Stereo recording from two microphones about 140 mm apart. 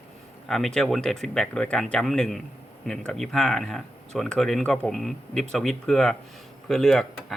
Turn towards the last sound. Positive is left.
turn(degrees=5)  # may be behind; listen again after turning